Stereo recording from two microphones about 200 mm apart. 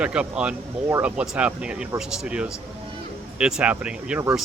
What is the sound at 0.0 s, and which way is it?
Speech, 5° right (ahead or behind).